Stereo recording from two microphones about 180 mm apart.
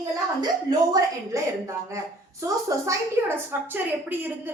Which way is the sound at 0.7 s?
20° right (ahead or behind).